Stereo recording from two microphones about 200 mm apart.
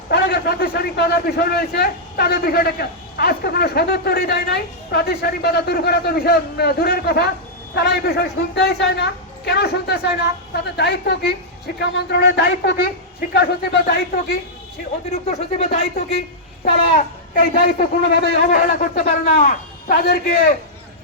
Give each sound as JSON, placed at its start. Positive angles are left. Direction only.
{"t": 0.1, "sound": "a man's voice", "side_deg": 55}
{"t": 15.3, "sound": "speech", "side_deg": 30}
{"t": 17.3, "sound": "a man's voice", "side_deg": 45}